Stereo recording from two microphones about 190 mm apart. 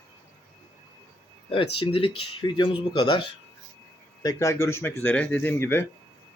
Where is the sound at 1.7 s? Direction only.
30° left (ahead or behind).